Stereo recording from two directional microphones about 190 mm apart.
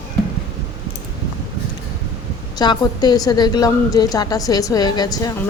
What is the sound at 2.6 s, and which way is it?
A woman's voice, 20° left (ahead or behind).